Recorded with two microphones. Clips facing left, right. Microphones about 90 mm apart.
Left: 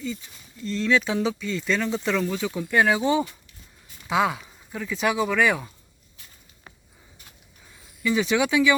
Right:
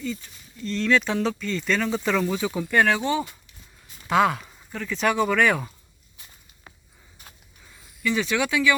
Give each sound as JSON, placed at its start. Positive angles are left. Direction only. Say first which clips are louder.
{"t": 0.0, "sound": "speech", "louder": "right 1 dB", "side_deg": 5}
{"t": 4.1, "sound": "speech", "louder": "right 3 dB", "side_deg": 5}
{"t": 8.0, "sound": "speech", "louder": "left 2 dB", "side_deg": 15}